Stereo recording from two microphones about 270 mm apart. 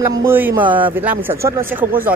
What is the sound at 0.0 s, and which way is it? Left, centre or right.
Speech, centre.